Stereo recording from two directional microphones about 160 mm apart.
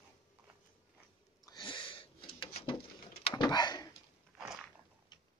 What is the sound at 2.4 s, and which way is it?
Bird, 35° left (ahead or behind).